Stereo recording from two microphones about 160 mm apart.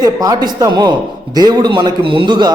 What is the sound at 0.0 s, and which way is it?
A man's voice, 25° right (ahead or behind).